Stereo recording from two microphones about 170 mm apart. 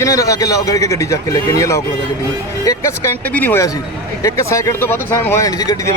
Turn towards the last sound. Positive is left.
turn(degrees=20)  # may be behind; listen again after turning